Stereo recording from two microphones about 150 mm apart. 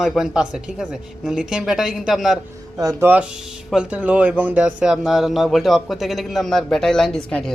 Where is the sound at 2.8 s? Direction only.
25° right (ahead or behind).